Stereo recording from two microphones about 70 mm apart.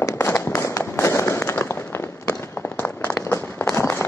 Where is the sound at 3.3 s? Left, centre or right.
Left.